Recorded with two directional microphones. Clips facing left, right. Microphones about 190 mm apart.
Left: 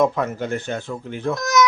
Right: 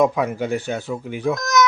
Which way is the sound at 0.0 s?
10° right (ahead or behind).